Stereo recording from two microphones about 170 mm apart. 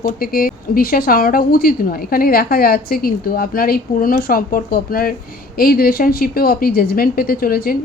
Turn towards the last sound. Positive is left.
turn(degrees=60)  # may be behind; listen again after turning